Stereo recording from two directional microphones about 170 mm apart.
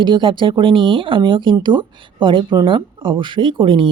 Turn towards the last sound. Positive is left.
turn(degrees=-30)  # may be behind; listen again after turning